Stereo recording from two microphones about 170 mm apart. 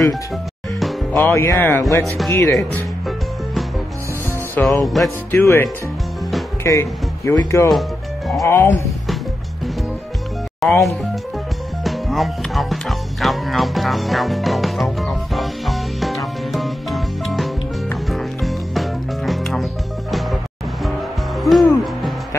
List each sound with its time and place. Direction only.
1.1 s speech: 15° left (ahead or behind)
2.5 s music: centre (ahead or behind)
5.4 s speech: 15° left (ahead or behind)
10.6 s speech: centre (ahead or behind)
11.8 s music: centre (ahead or behind)
21.4 s hoot: centre (ahead or behind)